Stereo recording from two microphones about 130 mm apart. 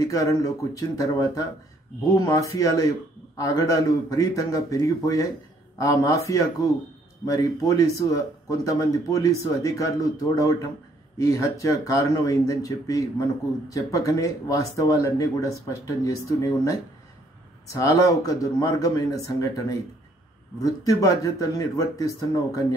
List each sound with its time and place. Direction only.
0.0 s speech: 25° left (ahead or behind)